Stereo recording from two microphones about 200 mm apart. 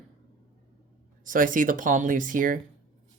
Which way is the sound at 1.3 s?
40° right (ahead or behind).